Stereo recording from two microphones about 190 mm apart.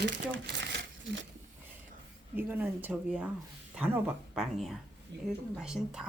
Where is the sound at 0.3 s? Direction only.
60° right (ahead or behind).